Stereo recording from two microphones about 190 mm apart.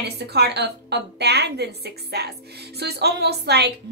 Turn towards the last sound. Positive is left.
turn(degrees=-60)  # may be behind; listen again after turning